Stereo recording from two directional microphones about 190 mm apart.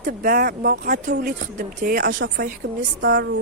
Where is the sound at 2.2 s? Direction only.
75° right (ahead or behind).